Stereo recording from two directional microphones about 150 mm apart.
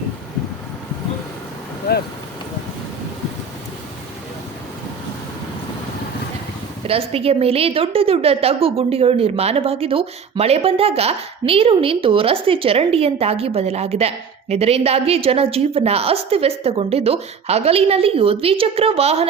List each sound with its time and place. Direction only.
1.9 s speech: 90° left
6.8 s a woman's voice: 40° right (ahead or behind)